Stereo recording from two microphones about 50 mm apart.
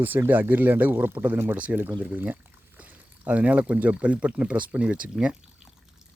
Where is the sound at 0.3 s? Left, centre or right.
Right.